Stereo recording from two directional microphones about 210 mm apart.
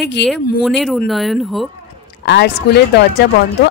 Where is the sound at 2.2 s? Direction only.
55° left (ahead or behind).